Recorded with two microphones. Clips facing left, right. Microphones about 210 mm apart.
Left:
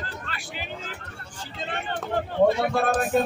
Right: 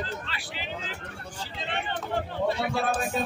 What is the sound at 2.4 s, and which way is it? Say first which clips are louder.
Speech: left 7 dB; 50° left (ahead or behind).